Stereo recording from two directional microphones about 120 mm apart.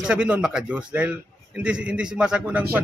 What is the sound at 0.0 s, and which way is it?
Speech, 10° right (ahead or behind).